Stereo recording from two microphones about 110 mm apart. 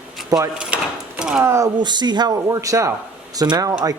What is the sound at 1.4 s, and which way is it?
Speech, 25° right (ahead or behind).